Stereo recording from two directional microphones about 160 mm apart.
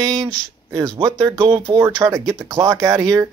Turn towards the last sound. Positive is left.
turn(degrees=-20)  # may be behind; listen again after turning